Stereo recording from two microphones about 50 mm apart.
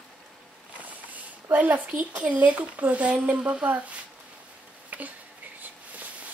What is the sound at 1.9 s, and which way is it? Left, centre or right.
Speech, right.